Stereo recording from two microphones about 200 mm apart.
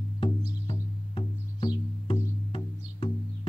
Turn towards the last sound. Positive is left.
turn(degrees=25)  # may be behind; listen again after turning